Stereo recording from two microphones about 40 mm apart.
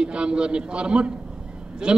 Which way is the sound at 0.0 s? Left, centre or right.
Right.